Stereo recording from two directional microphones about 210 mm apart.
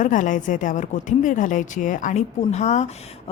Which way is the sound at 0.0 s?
40° left (ahead or behind).